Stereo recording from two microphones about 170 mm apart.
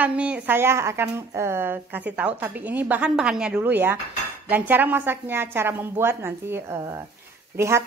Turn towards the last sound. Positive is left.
turn(degrees=-15)  # may be behind; listen again after turning